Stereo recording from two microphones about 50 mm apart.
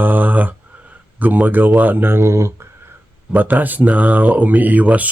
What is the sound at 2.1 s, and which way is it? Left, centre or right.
Speech, right.